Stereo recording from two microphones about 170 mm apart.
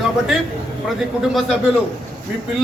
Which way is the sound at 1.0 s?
Centre (ahead or behind).